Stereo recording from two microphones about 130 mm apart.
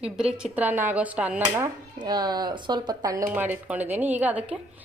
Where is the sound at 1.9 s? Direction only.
30° right (ahead or behind).